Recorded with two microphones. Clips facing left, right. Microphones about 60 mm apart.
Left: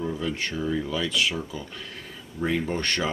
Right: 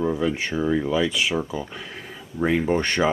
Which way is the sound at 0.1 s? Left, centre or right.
Centre.